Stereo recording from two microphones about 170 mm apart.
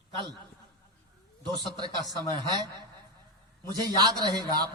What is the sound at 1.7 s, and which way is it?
A man's voice, 25° right (ahead or behind).